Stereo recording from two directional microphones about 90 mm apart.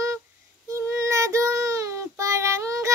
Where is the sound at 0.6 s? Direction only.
35° right (ahead or behind).